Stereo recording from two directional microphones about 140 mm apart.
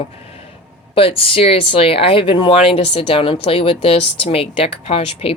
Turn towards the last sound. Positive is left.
turn(degrees=45)  # may be behind; listen again after turning